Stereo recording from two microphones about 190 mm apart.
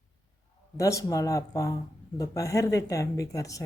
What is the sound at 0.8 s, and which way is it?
Speech, 15° left (ahead or behind).